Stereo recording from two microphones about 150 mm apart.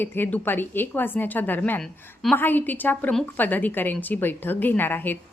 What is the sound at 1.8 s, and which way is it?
A woman's voice, 5° left (ahead or behind).